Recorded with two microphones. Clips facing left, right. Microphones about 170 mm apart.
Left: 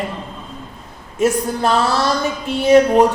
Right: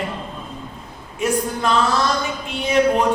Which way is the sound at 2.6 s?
40° left (ahead or behind).